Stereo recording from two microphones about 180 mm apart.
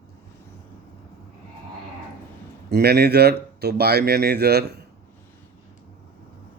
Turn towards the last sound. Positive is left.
turn(degrees=-65)  # may be behind; listen again after turning